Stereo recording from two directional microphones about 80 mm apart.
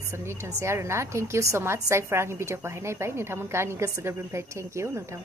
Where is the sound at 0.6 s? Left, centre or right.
Right.